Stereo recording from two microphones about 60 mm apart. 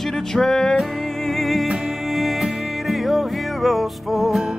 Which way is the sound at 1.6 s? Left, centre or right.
Centre.